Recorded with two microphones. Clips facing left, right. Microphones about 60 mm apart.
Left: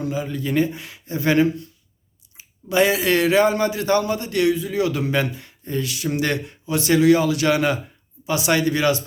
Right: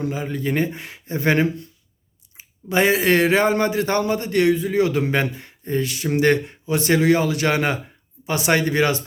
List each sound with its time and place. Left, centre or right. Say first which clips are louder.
0.0 s speech: right 1 dB; right